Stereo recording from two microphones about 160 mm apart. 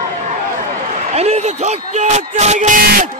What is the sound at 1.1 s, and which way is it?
Speech, 40° right (ahead or behind).